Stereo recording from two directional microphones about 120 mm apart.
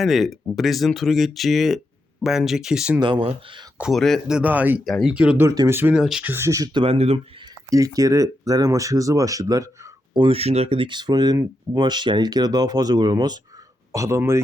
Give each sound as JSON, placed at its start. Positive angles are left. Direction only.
{"t": 0.0, "sound": "speech", "side_deg": 0}
{"t": 3.0, "sound": "speech", "side_deg": -45}
{"t": 3.8, "sound": "speech", "side_deg": 0}
{"t": 4.4, "sound": "speech", "side_deg": -15}
{"t": 4.8, "sound": "speech", "side_deg": 0}
{"t": 5.4, "sound": "speech", "side_deg": -25}
{"t": 5.9, "sound": "speech", "side_deg": -5}
{"t": 6.3, "sound": "speech", "side_deg": -25}
{"t": 6.7, "sound": "speech", "side_deg": -50}
{"t": 7.7, "sound": "speech", "side_deg": -30}
{"t": 10.2, "sound": "speech", "side_deg": -50}
{"t": 13.9, "sound": "speech", "side_deg": -25}